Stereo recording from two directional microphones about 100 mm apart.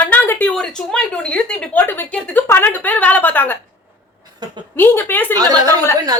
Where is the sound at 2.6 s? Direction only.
15° left (ahead or behind).